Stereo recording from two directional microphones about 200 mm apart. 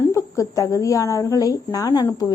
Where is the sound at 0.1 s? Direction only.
15° left (ahead or behind).